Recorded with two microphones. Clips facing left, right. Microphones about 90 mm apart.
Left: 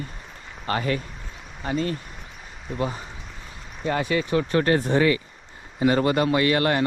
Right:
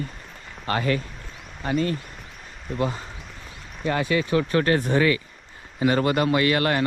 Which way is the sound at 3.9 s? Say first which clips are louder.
Right 1 dB; 30° left (ahead or behind).